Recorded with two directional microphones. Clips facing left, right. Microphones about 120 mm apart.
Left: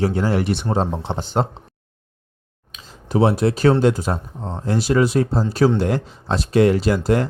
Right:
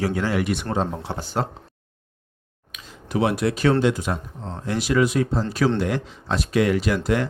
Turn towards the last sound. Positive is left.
turn(degrees=35)  # may be behind; listen again after turning